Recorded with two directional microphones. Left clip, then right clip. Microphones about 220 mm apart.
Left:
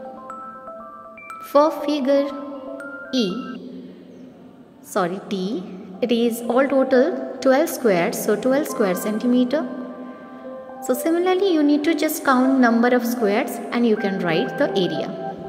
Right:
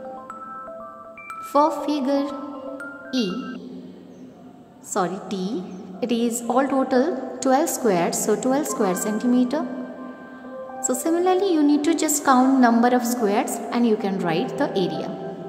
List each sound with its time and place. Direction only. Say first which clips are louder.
1.5 s a woman's voice: left 2 dB; centre (ahead or behind)
2.8 s music: left 3 dB; centre (ahead or behind)
4.9 s a woman's voice: left 2 dB; centre (ahead or behind)
10.8 s a woman's voice: left 2 dB; centre (ahead or behind)